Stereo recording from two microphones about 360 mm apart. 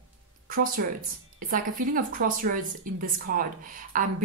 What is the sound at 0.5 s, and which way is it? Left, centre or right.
A woman's voice, right.